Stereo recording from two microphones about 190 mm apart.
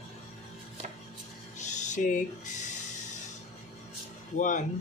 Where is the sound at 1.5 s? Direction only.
40° left (ahead or behind).